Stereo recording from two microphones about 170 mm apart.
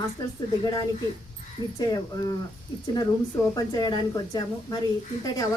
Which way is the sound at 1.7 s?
20° left (ahead or behind).